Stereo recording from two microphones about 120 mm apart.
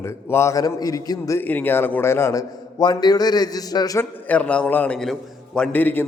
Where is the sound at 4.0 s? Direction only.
15° left (ahead or behind).